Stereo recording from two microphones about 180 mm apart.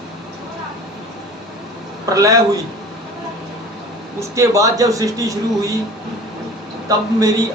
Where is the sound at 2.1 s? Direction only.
20° right (ahead or behind).